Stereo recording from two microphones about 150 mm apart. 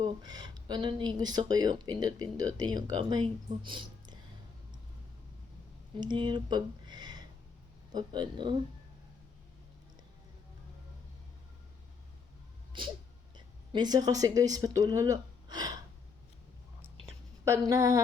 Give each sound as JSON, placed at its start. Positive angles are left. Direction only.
{"t": 0.0, "sound": "speech", "side_deg": -30}
{"t": 6.0, "sound": "speech", "side_deg": -30}
{"t": 12.7, "sound": "a woman's voice", "side_deg": -35}
{"t": 17.4, "sound": "speech", "side_deg": -20}